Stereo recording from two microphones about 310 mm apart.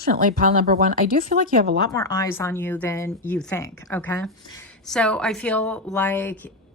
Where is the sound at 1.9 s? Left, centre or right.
Centre.